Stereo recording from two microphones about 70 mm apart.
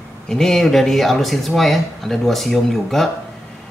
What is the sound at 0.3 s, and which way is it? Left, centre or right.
Speech, centre.